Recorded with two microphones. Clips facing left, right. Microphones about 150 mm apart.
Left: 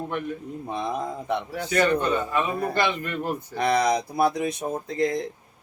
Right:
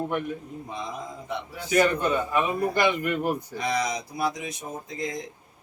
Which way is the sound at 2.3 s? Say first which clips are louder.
Even; 15° right (ahead or behind).